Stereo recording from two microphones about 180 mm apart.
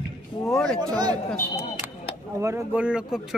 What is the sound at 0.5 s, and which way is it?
Speech, 5° left (ahead or behind).